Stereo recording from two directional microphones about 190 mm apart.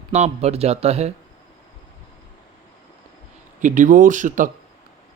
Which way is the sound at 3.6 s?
40° right (ahead or behind).